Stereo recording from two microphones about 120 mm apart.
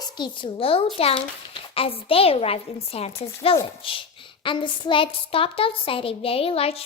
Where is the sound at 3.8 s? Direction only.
45° left (ahead or behind).